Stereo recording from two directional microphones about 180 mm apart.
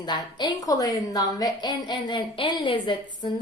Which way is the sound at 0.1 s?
25° left (ahead or behind).